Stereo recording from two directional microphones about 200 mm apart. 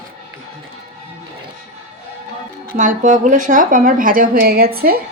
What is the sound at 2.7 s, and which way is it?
Speech, 40° right (ahead or behind).